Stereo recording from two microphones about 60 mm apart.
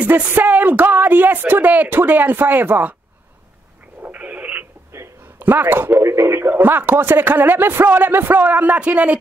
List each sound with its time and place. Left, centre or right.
0.3 s speech: right
4.0 s radio: right
5.4 s speech: right
5.9 s speech: right